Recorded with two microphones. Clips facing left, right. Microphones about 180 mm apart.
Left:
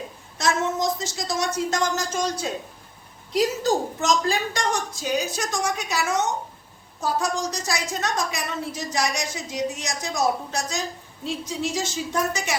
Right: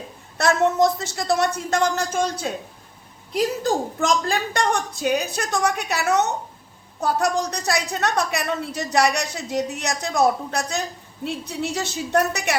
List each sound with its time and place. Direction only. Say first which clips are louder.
0.3 s a woman's voice: right 6 dB; 60° right (ahead or behind)